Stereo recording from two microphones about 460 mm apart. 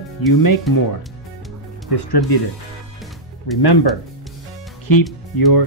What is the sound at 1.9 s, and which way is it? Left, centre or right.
Speech, left.